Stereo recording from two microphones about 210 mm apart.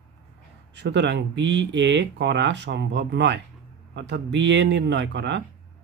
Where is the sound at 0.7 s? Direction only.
55° right (ahead or behind).